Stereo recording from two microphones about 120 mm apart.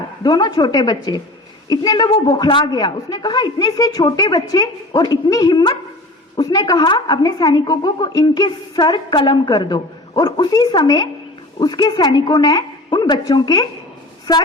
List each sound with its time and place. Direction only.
0.2 s a woman's voice: 35° left (ahead or behind)